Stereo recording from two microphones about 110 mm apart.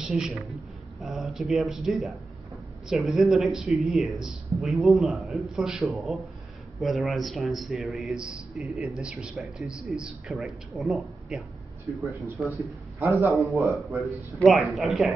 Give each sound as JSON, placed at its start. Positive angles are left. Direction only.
{"t": 0.0, "sound": "a woman's voice", "side_deg": -5}
{"t": 13.0, "sound": "a man's voice", "side_deg": -25}
{"t": 13.7, "sound": "speech", "side_deg": 0}